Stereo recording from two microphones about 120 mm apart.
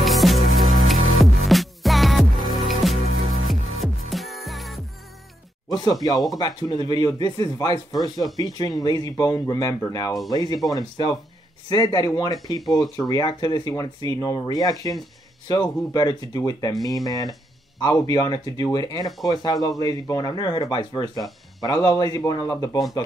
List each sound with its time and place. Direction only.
0.0 s music: centre (ahead or behind)
5.7 s a sound: 35° left (ahead or behind)
6.3 s speech: 35° left (ahead or behind)